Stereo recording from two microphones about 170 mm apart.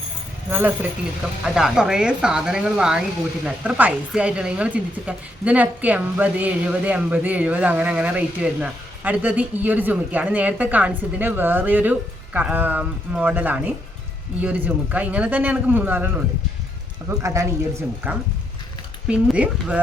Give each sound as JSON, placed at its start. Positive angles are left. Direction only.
{"t": 0.5, "sound": "speech", "side_deg": -10}
{"t": 17.2, "sound": "speech", "side_deg": -15}